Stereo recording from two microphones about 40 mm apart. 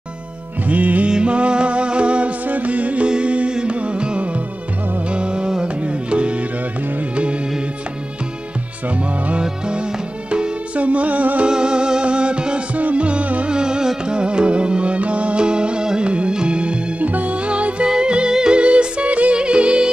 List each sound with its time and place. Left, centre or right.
0.7 s music: right
1.0 s music: right
2.4 s music: right
9.4 s music: right
11.4 s music: right
13.5 s music: centre
17.0 s music: right